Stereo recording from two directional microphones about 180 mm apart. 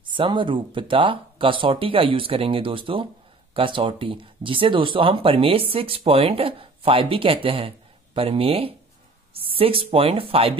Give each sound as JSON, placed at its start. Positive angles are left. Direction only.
{"t": 0.1, "sound": "speech", "side_deg": -25}